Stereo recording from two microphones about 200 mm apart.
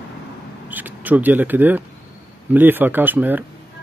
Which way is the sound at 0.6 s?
10° right (ahead or behind).